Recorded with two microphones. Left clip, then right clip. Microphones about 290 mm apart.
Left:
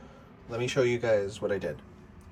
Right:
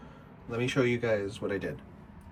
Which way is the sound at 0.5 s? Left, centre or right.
Centre.